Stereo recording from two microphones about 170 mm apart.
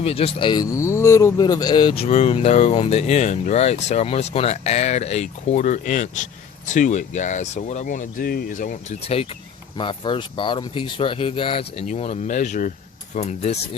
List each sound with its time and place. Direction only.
0.0 s speech: 35° left (ahead or behind)
11.9 s speech: 40° left (ahead or behind)